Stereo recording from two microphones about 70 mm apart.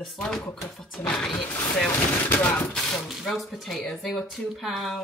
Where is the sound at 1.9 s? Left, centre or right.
Left.